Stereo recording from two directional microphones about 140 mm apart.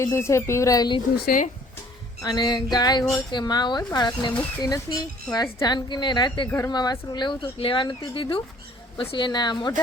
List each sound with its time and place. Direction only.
0.0 s a woman's voice: 20° left (ahead or behind)
1.2 s speech: 90° left
2.2 s music: 30° left (ahead or behind)
3.3 s a woman's voice: 30° left (ahead or behind)
7.6 s music: 35° left (ahead or behind)